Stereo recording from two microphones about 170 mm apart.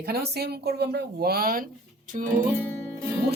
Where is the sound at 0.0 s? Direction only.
65° right (ahead or behind).